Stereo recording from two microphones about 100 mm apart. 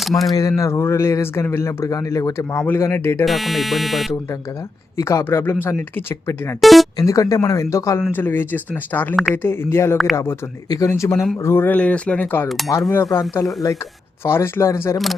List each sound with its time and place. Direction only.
0.0 s speech: centre (ahead or behind)
0.3 s speech: 35° left (ahead or behind)
3.2 s speech: centre (ahead or behind)
4.9 s speech: 30° left (ahead or behind)
6.6 s speech: centre (ahead or behind)
6.9 s speech: 35° left (ahead or behind)
8.1 s speech: 20° left (ahead or behind)
12.5 s speech: centre (ahead or behind)
12.9 s speech: 25° left (ahead or behind)
14.3 s speech: 25° left (ahead or behind)